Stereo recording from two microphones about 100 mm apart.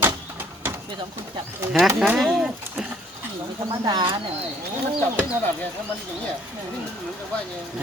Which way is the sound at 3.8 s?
50° right (ahead or behind).